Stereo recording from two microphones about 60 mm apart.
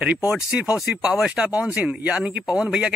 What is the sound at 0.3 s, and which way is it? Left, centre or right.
Speech, centre.